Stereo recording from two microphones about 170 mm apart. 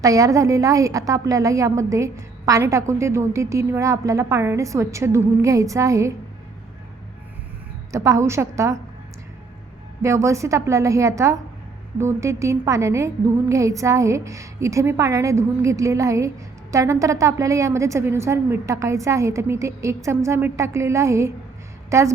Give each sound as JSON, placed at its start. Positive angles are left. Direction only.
{"t": 0.0, "sound": "a woman's voice", "side_deg": -20}
{"t": 7.9, "sound": "a woman's voice", "side_deg": -20}
{"t": 10.0, "sound": "a woman's voice", "side_deg": -20}